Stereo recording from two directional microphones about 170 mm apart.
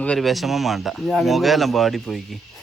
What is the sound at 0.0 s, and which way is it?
Speech, 5° left (ahead or behind).